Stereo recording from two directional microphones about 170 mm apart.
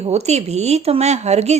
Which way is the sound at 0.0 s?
40° right (ahead or behind).